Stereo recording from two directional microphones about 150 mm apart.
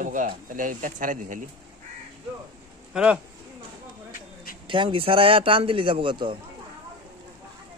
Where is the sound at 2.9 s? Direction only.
5° right (ahead or behind).